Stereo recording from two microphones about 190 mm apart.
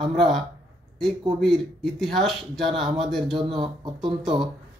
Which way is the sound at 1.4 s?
Centre (ahead or behind).